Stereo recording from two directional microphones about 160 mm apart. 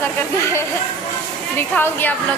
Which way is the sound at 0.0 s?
15° left (ahead or behind).